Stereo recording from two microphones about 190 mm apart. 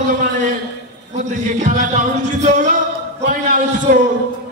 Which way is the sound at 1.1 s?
40° right (ahead or behind).